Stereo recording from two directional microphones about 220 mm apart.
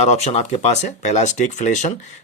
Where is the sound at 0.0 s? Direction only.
30° left (ahead or behind).